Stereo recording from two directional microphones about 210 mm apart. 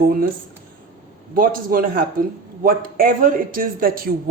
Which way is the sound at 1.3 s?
45° right (ahead or behind).